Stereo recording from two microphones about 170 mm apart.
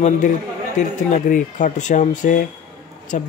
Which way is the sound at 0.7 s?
45° left (ahead or behind).